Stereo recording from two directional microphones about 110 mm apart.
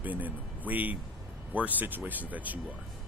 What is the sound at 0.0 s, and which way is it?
Speech, 15° right (ahead or behind).